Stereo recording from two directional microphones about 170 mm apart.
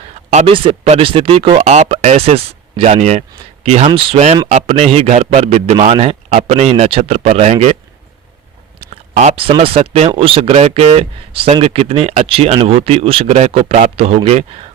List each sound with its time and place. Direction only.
0.3 s speech: 30° right (ahead or behind)
9.4 s speech: 30° right (ahead or behind)